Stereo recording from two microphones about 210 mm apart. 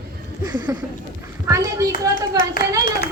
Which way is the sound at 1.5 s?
15° right (ahead or behind).